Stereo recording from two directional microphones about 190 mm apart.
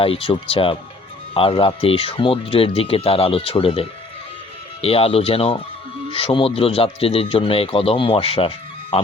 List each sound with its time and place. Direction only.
0.0 s a man's voice: 30° left (ahead or behind)